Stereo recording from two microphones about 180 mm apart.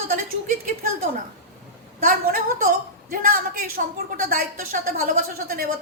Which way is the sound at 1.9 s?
50° right (ahead or behind).